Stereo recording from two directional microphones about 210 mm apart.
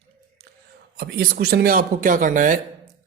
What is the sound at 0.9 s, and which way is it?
Speech, 50° right (ahead or behind).